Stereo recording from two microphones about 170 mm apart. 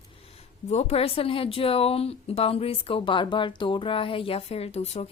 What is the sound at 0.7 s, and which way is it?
Speech, 35° left (ahead or behind).